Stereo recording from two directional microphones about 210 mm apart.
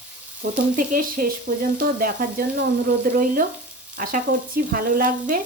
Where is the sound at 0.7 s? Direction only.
40° right (ahead or behind).